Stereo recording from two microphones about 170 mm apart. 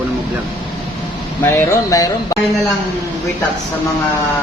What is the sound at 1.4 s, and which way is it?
Speech, 15° left (ahead or behind).